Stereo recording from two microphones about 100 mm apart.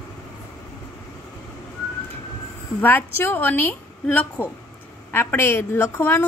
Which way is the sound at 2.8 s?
20° left (ahead or behind).